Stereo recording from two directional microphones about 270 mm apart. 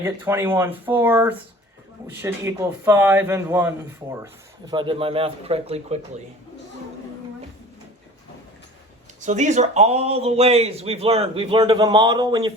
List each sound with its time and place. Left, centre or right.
0.0 s a man's voice: centre
9.2 s speech: right